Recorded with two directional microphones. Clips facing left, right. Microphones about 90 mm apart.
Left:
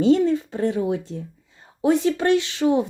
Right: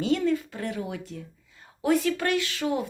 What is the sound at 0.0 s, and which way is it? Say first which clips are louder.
Speech: left 7 dB; 30° left (ahead or behind).